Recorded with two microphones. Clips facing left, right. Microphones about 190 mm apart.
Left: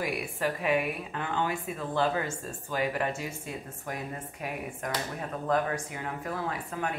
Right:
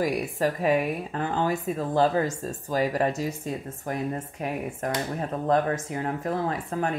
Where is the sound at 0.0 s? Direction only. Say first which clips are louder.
Right 6 dB; 40° right (ahead or behind).